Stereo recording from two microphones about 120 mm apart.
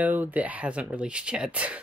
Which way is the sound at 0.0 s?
15° right (ahead or behind).